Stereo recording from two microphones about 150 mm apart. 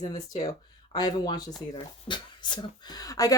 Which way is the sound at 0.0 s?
25° left (ahead or behind).